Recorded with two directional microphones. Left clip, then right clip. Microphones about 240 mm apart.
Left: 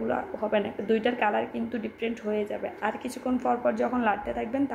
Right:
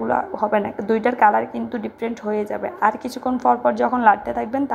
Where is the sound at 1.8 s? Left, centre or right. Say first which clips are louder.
Right 5 dB; right.